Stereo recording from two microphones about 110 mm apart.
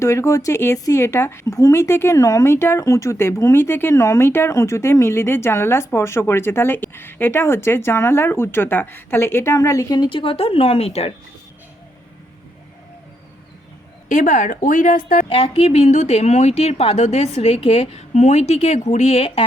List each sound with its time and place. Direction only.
0.0 s speech: 25° left (ahead or behind); by 11.1 s 70° left (ahead or behind)
15.3 s a woman's voice: 55° left (ahead or behind)
18.9 s speech: 85° left